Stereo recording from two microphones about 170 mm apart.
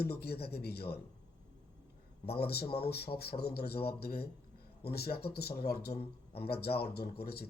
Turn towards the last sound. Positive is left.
turn(degrees=65)  # may be behind; listen again after turning